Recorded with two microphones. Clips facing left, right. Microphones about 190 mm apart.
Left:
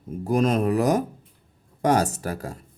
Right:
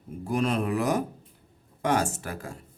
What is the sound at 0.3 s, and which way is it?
Speech, 40° left (ahead or behind).